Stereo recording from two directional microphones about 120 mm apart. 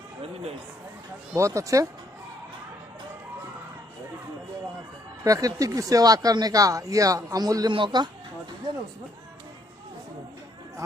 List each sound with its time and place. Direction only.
1.3 s speech: 25° right (ahead or behind)
5.2 s speech: 30° right (ahead or behind)